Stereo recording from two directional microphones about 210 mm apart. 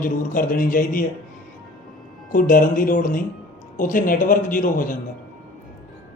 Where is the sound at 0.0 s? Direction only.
40° left (ahead or behind).